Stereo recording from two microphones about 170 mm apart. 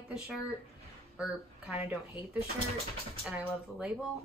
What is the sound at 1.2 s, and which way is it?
Speech, 5° right (ahead or behind).